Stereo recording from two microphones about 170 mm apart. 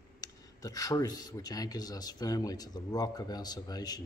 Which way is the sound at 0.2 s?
20° left (ahead or behind).